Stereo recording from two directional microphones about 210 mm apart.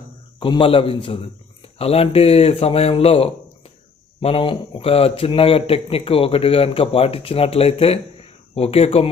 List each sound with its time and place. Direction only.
0.3 s a man's voice: 25° left (ahead or behind)